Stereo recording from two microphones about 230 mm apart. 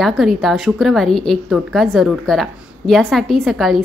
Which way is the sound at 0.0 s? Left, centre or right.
Centre.